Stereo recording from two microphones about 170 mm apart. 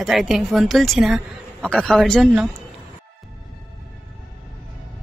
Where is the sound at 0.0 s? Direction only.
Centre (ahead or behind).